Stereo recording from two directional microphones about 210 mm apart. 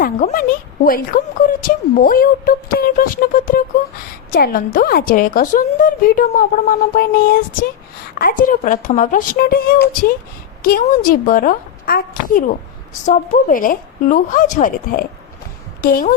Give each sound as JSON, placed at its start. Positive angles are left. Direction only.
{"t": 0.0, "sound": "a woman's voice", "side_deg": 40}